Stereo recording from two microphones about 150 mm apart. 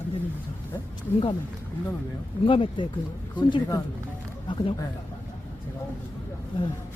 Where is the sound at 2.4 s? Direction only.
35° left (ahead or behind).